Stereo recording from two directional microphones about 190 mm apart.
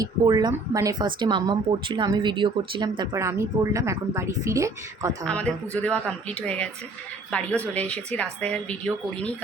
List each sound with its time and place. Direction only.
0.0 s speech: 20° right (ahead or behind)
5.2 s speech: 5° left (ahead or behind)